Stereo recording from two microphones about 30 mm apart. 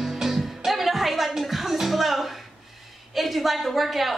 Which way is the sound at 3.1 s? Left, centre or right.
Centre.